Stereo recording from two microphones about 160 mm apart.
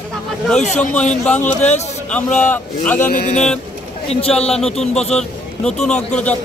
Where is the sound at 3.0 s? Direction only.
70° left (ahead or behind).